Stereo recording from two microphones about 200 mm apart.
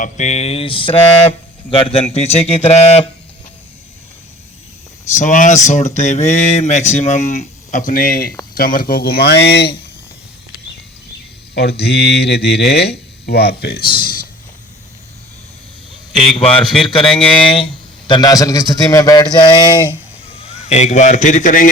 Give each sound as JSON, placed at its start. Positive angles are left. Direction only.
{"t": 0.0, "sound": "a man's voice", "side_deg": 35}
{"t": 5.2, "sound": "speech", "side_deg": 40}
{"t": 11.5, "sound": "speech", "side_deg": 55}
{"t": 16.4, "sound": "a man's voice", "side_deg": 30}
{"t": 17.1, "sound": "speech", "side_deg": 5}
{"t": 18.1, "sound": "a man's voice", "side_deg": 20}